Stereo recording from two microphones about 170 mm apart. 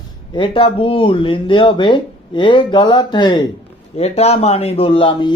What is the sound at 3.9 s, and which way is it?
Speech, 40° left (ahead or behind).